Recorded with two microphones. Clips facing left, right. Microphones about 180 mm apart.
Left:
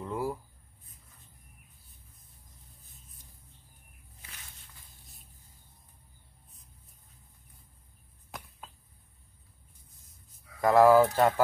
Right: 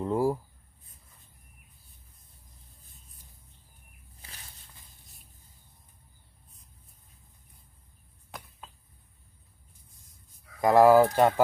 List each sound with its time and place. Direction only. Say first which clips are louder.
0.0 s writing: right 7 dB; 35° right (ahead or behind)
4.2 s walk: right 2 dB; 35° right (ahead or behind)
10.6 s speech: right 2 dB; 20° right (ahead or behind)